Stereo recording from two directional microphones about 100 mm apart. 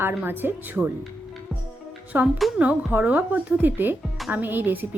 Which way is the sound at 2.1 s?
20° right (ahead or behind).